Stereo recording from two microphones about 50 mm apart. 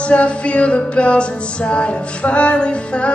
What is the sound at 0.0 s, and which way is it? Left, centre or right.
Music, left.